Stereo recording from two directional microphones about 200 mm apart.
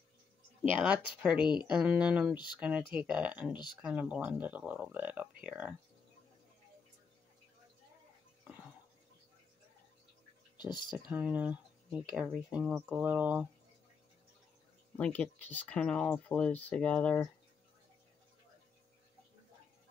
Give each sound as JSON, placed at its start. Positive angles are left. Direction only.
{"t": 1.2, "sound": "speech", "side_deg": -5}
{"t": 10.6, "sound": "speech", "side_deg": 20}
{"t": 11.1, "sound": "speech", "side_deg": -5}
{"t": 15.0, "sound": "speech", "side_deg": 5}